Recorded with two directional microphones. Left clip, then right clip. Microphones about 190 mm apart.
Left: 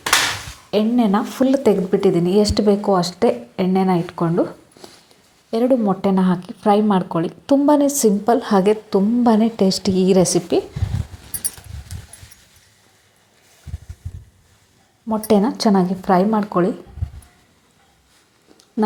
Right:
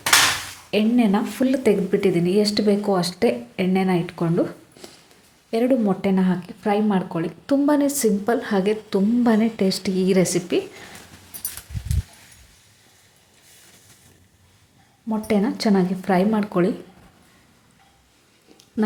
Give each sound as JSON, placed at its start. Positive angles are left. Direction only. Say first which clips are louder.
{"t": 0.7, "sound": "speech", "louder": "left 3 dB", "side_deg": 10}
{"t": 6.0, "sound": "a woman's voice", "louder": "left 4 dB", "side_deg": 20}
{"t": 15.3, "sound": "speech", "louder": "left 5 dB", "side_deg": 15}